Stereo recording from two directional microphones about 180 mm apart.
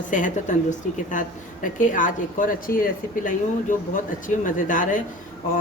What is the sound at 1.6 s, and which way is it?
A woman's voice, 45° left (ahead or behind).